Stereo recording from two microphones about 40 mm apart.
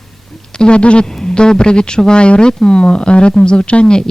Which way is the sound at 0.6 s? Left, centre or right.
Left.